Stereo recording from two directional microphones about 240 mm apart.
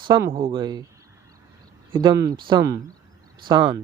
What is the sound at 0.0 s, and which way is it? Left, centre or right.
Speech, centre.